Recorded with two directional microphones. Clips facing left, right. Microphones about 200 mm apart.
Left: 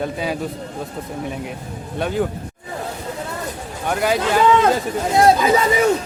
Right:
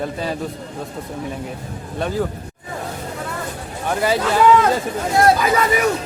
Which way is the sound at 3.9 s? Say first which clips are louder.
Even; centre (ahead or behind).